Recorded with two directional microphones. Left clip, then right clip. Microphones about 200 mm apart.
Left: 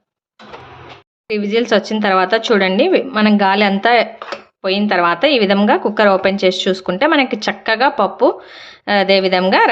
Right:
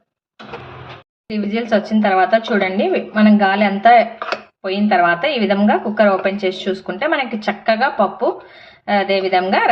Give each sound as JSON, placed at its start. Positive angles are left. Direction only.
{"t": 1.3, "sound": "a woman's voice", "side_deg": 40}